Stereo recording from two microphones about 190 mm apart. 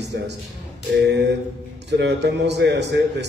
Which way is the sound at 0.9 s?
65° right (ahead or behind).